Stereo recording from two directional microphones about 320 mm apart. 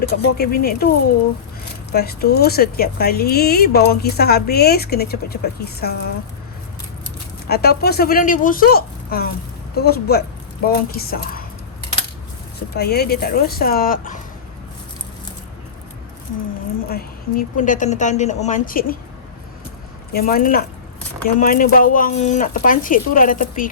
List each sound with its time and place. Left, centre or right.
0.1 s speech: left
7.4 s speech: left
12.7 s speech: left
16.9 s speech: left
20.1 s speech: left